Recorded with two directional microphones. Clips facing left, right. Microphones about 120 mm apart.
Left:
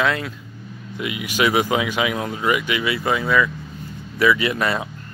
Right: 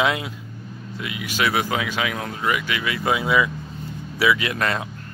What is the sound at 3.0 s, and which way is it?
Speech, 10° right (ahead or behind).